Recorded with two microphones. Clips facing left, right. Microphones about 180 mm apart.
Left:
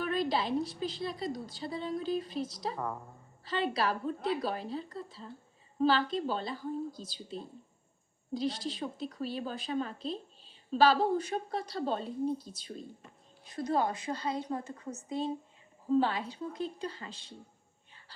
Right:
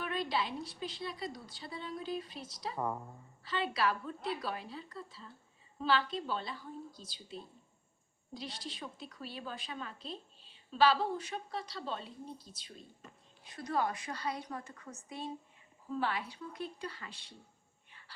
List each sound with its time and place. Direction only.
0.0 s a woman's voice: 40° left (ahead or behind)
2.7 s speech: 10° right (ahead or behind)
3.4 s a woman's voice: 40° left (ahead or behind)
13.6 s a woman's voice: 25° left (ahead or behind)